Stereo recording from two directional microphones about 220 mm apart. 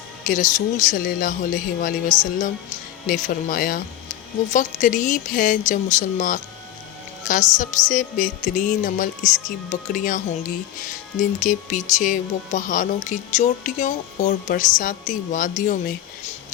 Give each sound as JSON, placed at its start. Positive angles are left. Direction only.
{"t": 0.3, "sound": "speech", "side_deg": 35}
{"t": 11.3, "sound": "speech", "side_deg": 35}